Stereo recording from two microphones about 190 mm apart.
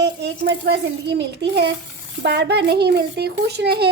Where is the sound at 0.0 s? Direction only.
65° right (ahead or behind).